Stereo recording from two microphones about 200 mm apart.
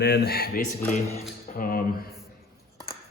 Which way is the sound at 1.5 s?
45° left (ahead or behind).